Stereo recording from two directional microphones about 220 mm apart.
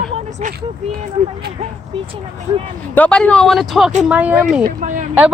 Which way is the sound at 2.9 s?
5° left (ahead or behind).